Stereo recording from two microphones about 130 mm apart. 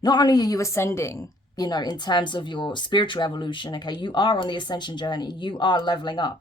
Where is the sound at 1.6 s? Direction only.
35° left (ahead or behind).